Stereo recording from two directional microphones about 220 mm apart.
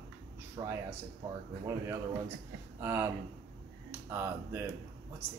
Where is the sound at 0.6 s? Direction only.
15° right (ahead or behind).